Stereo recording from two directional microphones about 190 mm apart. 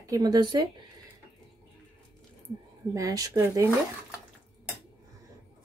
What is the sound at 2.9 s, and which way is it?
Speech, 20° right (ahead or behind).